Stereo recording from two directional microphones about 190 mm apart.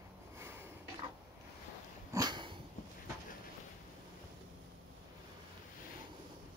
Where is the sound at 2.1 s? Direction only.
20° right (ahead or behind).